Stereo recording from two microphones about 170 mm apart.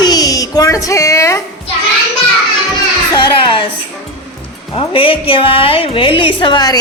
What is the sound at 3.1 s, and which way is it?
Music, 30° left (ahead or behind).